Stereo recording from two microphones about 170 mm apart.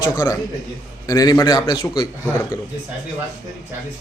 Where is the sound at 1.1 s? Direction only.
20° left (ahead or behind).